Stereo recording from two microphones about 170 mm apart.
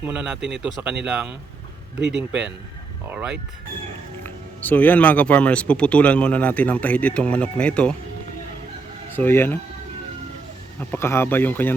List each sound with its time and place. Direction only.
0.0 s speech: 5° right (ahead or behind)
2.0 s a man's voice: 90° right
3.1 s speech: 10° right (ahead or behind)
4.2 s speech: 10° left (ahead or behind)
9.1 s speech: 10° left (ahead or behind)
10.8 s speech: 15° left (ahead or behind)